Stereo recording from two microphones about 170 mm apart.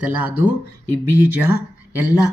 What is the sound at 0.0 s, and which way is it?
Speech, 10° right (ahead or behind).